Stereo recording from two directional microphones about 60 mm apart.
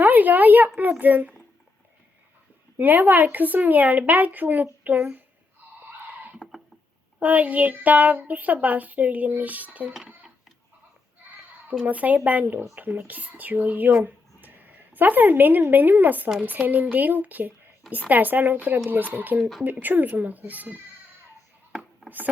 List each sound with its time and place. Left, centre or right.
0.0 s a sound: right
0.8 s speech: right
2.7 s speech: right
5.8 s a sound: right
7.2 s speech: right
11.9 s speech: right